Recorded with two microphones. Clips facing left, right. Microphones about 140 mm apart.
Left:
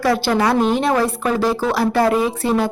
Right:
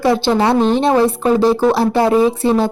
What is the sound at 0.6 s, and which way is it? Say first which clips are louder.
Speech: right 3 dB; 5° left (ahead or behind).